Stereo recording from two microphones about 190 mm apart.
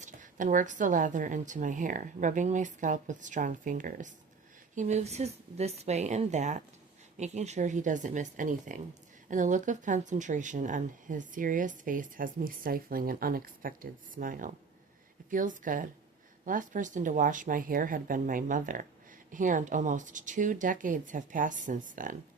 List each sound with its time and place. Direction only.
0.0 s a woman's voice: 40° right (ahead or behind)